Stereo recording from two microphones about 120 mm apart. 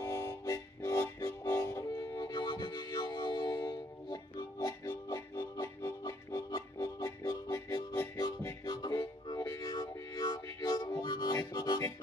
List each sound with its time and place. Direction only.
0.0 s harmonica: 20° left (ahead or behind)
1.5 s music: 20° left (ahead or behind)
8.6 s music: 35° left (ahead or behind)